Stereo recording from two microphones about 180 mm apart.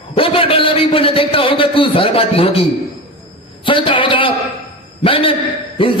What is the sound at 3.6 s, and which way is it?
A man's voice, 30° left (ahead or behind).